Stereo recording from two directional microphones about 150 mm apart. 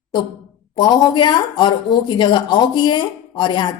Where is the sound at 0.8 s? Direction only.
30° left (ahead or behind).